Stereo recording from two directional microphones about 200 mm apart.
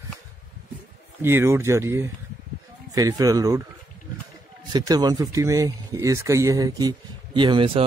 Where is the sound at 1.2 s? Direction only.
10° right (ahead or behind).